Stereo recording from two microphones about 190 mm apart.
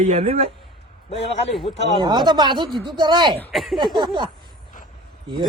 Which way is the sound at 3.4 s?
Centre (ahead or behind).